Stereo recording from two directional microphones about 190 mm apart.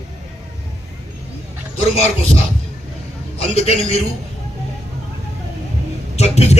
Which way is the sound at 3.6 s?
35° left (ahead or behind).